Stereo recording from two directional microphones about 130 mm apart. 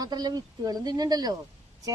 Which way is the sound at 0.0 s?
30° right (ahead or behind).